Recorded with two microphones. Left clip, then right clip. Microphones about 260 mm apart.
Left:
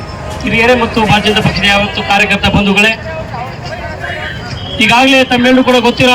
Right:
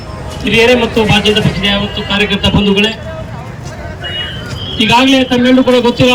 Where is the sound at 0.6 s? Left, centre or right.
Centre.